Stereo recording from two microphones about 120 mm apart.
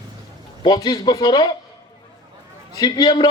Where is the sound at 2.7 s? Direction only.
35° left (ahead or behind).